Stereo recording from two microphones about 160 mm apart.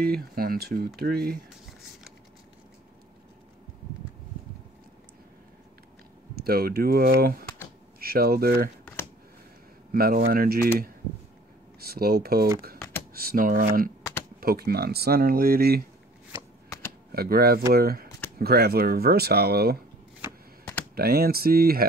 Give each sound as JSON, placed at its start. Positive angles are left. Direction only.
{"t": 0.0, "sound": "speech", "side_deg": -70}
{"t": 6.3, "sound": "speech", "side_deg": -70}
{"t": 9.9, "sound": "speech", "side_deg": -70}
{"t": 11.8, "sound": "speech", "side_deg": -70}
{"t": 17.1, "sound": "speech", "side_deg": -70}
{"t": 20.9, "sound": "speech", "side_deg": -75}